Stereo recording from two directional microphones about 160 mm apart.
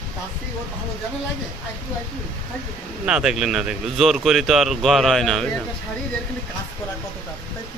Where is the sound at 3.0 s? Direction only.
5° right (ahead or behind).